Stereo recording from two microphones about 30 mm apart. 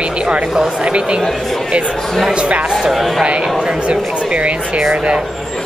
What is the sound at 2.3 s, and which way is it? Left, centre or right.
Speech, right.